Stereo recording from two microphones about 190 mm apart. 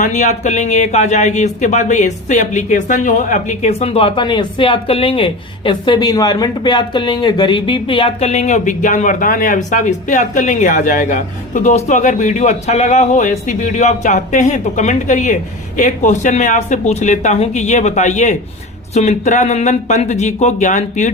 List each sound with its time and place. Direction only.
0.0 s speech: 40° left (ahead or behind)